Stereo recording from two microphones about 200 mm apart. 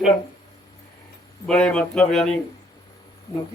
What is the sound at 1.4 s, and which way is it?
Speech, 5° left (ahead or behind).